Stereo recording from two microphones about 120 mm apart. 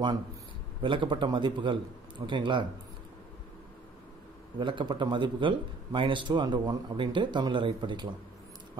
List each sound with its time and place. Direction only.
0.8 s a man's voice: 45° right (ahead or behind)
4.6 s a man's voice: 40° right (ahead or behind)